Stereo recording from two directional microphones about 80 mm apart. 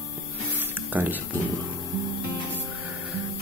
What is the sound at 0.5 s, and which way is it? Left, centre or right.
Music, right.